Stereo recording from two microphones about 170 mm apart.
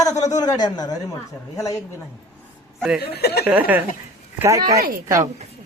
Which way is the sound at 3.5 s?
10° right (ahead or behind).